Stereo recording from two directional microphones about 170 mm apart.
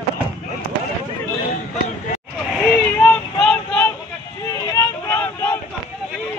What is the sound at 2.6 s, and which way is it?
Vehicle, 10° left (ahead or behind).